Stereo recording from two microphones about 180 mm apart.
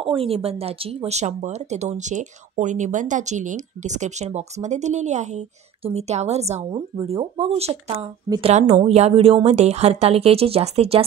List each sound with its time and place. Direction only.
0.0 s speech: 30° right (ahead or behind)